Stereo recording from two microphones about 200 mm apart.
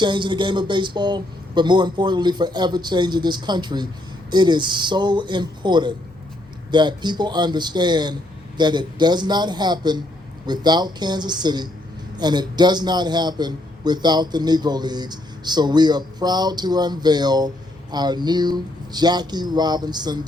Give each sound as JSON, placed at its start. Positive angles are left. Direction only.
{"t": 0.0, "sound": "a man's voice", "side_deg": -25}